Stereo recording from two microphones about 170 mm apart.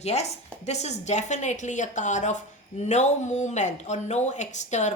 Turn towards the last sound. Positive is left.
turn(degrees=45)  # may be behind; listen again after turning